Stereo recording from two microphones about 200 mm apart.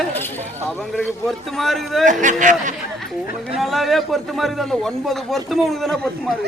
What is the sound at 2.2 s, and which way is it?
Speech, 40° right (ahead or behind).